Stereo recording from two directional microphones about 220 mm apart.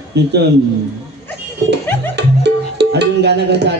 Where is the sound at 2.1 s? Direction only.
50° right (ahead or behind).